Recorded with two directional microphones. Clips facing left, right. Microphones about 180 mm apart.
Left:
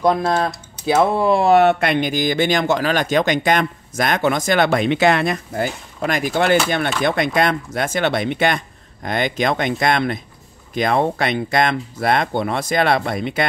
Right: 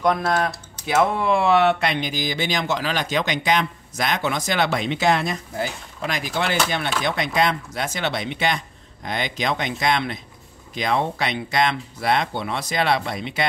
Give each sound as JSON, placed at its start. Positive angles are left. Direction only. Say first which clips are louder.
{"t": 0.0, "sound": "speech", "louder": "left 3 dB", "side_deg": 30}